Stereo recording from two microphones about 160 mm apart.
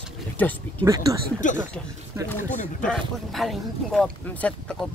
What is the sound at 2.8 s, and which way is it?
Speech, centre (ahead or behind).